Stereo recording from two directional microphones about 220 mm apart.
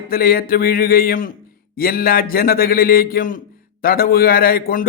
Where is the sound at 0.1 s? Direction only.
40° left (ahead or behind).